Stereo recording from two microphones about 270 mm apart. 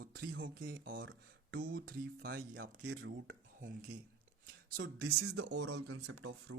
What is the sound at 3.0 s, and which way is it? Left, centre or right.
Dishes, right.